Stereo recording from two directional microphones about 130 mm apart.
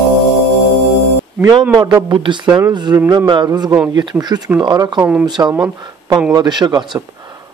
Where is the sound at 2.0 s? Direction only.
35° right (ahead or behind).